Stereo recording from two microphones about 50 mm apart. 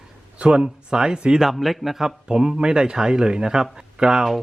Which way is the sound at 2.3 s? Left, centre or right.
Centre.